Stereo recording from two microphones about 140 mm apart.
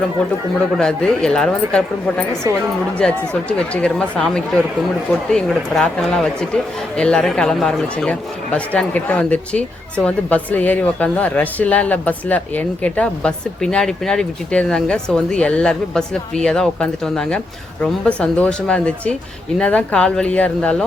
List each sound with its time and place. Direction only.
0.8 s speech: 5° left (ahead or behind)